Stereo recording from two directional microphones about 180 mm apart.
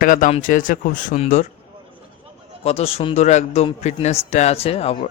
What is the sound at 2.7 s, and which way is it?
A man's voice, 35° left (ahead or behind).